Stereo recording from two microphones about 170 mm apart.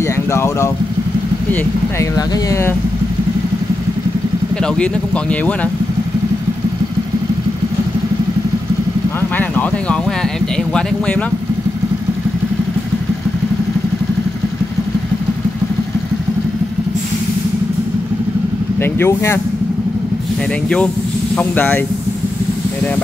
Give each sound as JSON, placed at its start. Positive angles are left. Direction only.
{"t": 0.0, "sound": "vehicle", "side_deg": 15}
{"t": 1.5, "sound": "speech", "side_deg": 10}
{"t": 4.6, "sound": "speech", "side_deg": 5}
{"t": 9.4, "sound": "speech", "side_deg": 10}
{"t": 18.8, "sound": "speech", "side_deg": 15}
{"t": 21.4, "sound": "speech", "side_deg": 10}